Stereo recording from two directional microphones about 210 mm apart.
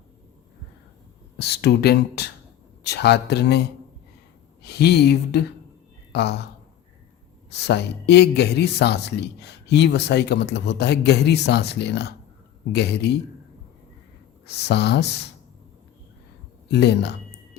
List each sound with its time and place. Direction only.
1.4 s a man's voice: 50° left (ahead or behind)
7.5 s a man's voice: 55° left (ahead or behind)
14.4 s a man's voice: 50° left (ahead or behind)
16.6 s a sound: 55° left (ahead or behind)